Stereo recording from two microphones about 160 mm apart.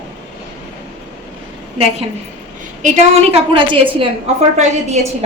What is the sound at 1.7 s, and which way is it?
A woman's voice, 35° right (ahead or behind).